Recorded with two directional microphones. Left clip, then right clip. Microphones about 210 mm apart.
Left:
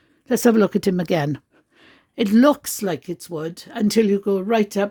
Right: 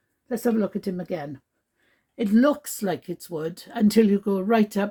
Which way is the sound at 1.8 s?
50° left (ahead or behind).